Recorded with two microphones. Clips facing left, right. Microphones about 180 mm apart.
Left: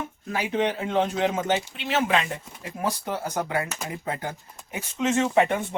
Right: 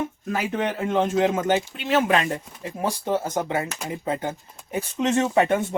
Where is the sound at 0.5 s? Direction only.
45° right (ahead or behind).